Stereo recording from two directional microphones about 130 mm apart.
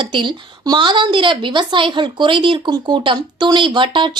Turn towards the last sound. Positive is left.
turn(degrees=-40)  # may be behind; listen again after turning